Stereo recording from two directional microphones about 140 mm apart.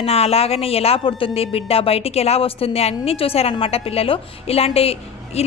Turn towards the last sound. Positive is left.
turn(degrees=45)  # may be behind; listen again after turning